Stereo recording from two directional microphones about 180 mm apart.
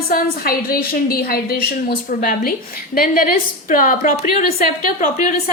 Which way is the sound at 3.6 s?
50° left (ahead or behind).